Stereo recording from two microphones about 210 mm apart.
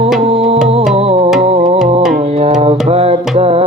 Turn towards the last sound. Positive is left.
turn(degrees=-30)  # may be behind; listen again after turning